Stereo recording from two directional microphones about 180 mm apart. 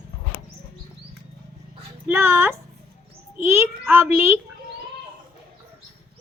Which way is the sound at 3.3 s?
15° right (ahead or behind).